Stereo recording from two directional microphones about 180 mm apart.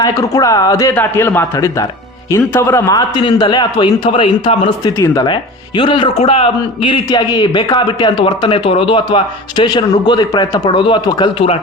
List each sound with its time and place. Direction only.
0.0 s a man's voice: 20° left (ahead or behind)
3.2 s speech: 25° left (ahead or behind)